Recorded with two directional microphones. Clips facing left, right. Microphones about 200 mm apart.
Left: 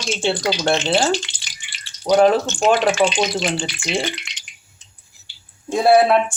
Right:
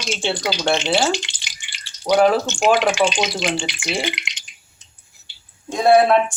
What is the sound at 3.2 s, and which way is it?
Speech, 15° right (ahead or behind).